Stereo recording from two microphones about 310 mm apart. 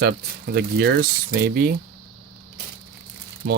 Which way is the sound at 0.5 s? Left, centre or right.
Right.